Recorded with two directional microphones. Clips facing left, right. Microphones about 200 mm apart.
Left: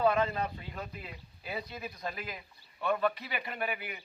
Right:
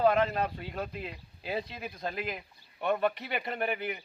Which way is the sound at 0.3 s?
60° right (ahead or behind).